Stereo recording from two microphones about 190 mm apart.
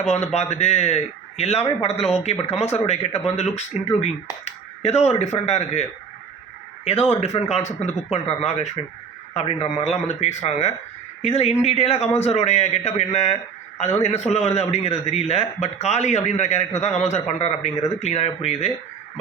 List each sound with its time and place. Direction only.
0.3 s a man's voice: 35° left (ahead or behind)
7.1 s a man's voice: 35° left (ahead or behind)